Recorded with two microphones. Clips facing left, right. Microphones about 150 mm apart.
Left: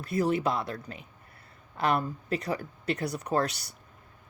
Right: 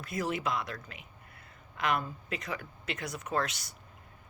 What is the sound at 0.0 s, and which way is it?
Speech, 35° left (ahead or behind).